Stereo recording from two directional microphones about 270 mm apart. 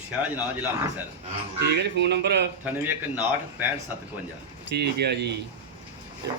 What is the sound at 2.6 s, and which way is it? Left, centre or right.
A man's voice, centre.